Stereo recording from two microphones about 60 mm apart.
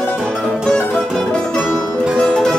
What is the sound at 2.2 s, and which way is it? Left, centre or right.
Music, centre.